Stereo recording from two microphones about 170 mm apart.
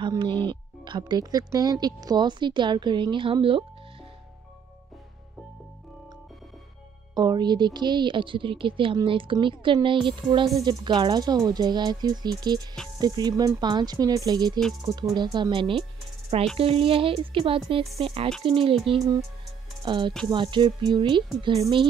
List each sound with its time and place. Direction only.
0.5 s speech: 25° right (ahead or behind)
7.2 s speech: 25° right (ahead or behind)